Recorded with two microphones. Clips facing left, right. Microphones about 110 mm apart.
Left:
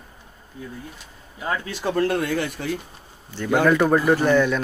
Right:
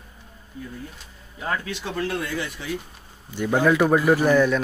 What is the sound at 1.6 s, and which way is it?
Speech, 45° left (ahead or behind).